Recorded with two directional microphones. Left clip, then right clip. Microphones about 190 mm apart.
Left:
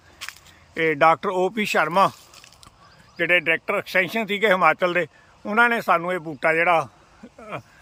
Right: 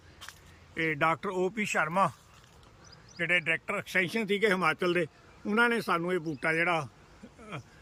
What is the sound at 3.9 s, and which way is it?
A man's voice, 20° left (ahead or behind).